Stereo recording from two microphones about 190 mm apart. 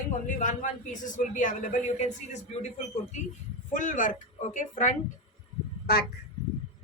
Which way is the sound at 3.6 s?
40° left (ahead or behind).